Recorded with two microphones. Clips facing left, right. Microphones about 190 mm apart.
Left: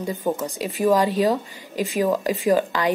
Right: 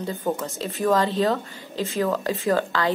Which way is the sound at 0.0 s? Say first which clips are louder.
Left 2 dB; 15° left (ahead or behind).